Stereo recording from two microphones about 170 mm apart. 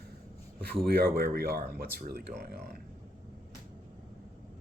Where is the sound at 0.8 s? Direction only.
65° right (ahead or behind).